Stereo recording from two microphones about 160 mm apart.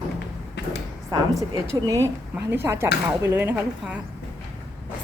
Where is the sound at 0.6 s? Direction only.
90° left.